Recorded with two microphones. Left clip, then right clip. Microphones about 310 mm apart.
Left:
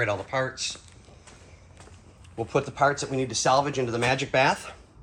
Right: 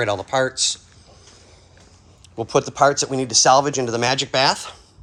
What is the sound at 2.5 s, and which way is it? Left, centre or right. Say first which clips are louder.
Speech: right 7 dB; centre.